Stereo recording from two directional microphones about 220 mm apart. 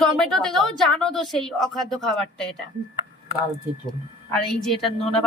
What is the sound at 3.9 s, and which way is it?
A woman's voice, centre (ahead or behind).